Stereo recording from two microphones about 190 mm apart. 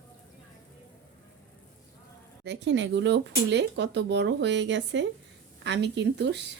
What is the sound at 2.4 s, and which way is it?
A woman's voice, 65° right (ahead or behind).